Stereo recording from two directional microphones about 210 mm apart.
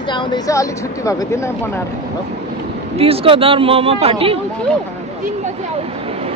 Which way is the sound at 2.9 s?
25° right (ahead or behind).